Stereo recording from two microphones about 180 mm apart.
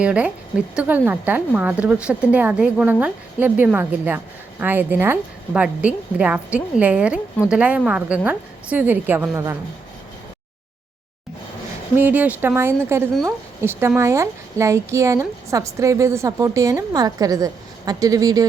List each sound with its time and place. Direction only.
0.0 s a woman's voice: 5° right (ahead or behind)
11.9 s a woman's voice: 10° right (ahead or behind)